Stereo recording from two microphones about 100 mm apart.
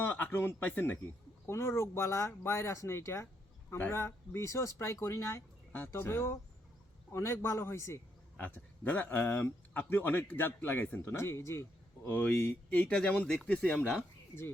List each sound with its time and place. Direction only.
0.0 s speech: 20° left (ahead or behind)
8.4 s speech: 20° left (ahead or behind)